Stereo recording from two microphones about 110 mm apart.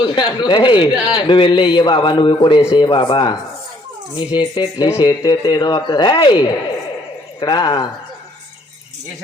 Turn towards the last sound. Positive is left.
turn(degrees=40)  # may be behind; listen again after turning